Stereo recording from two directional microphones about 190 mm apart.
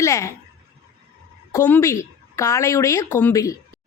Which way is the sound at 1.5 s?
15° left (ahead or behind).